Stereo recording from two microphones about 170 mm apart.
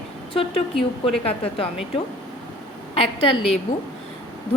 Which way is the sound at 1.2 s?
35° left (ahead or behind).